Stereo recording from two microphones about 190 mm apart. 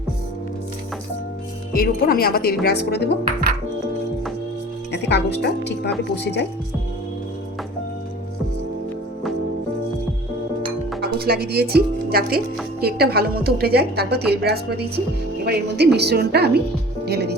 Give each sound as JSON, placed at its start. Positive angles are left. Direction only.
{"t": 1.7, "sound": "a woman's voice", "side_deg": 50}
{"t": 4.9, "sound": "speech", "side_deg": 60}
{"t": 11.0, "sound": "a woman's voice", "side_deg": -55}